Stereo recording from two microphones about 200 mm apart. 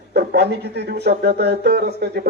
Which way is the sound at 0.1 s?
55° right (ahead or behind).